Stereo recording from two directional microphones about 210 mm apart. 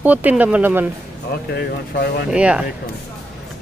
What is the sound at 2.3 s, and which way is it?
Speech, 5° right (ahead or behind).